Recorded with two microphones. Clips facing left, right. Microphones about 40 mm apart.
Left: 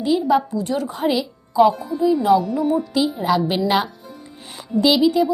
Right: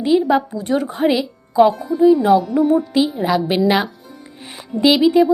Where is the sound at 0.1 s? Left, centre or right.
Right.